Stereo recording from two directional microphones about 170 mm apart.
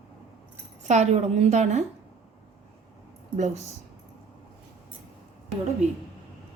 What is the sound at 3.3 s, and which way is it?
Speech, 45° right (ahead or behind).